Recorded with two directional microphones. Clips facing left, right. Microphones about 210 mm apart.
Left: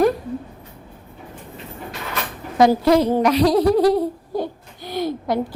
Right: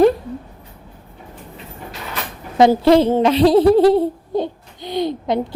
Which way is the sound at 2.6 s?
25° right (ahead or behind).